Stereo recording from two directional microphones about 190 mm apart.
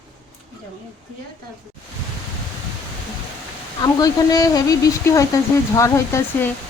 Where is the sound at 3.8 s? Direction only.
20° left (ahead or behind).